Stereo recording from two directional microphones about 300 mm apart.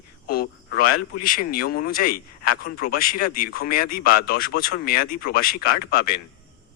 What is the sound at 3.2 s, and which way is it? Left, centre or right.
Speech, left.